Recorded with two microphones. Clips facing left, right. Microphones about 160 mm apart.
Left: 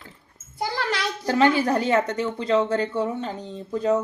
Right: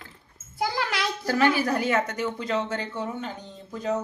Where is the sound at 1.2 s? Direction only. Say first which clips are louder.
Left 3 dB; 25° left (ahead or behind).